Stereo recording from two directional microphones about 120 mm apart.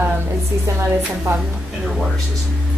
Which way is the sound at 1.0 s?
10° right (ahead or behind).